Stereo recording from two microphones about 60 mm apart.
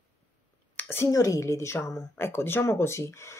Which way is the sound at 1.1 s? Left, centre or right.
Left.